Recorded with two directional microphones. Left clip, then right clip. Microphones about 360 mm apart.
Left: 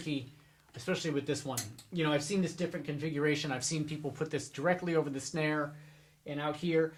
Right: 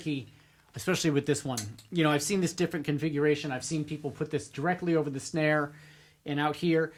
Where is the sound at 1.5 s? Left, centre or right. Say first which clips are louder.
Right 3 dB; right.